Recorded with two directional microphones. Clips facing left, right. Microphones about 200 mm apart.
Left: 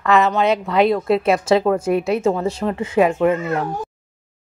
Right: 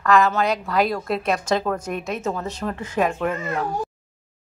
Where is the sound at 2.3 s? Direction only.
25° left (ahead or behind).